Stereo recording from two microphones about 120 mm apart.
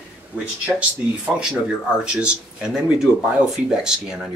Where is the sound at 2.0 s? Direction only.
10° right (ahead or behind).